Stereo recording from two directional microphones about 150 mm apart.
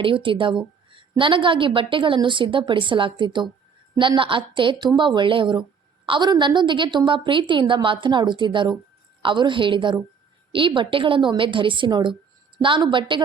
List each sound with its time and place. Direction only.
0.0 s a woman's voice: 35° right (ahead or behind)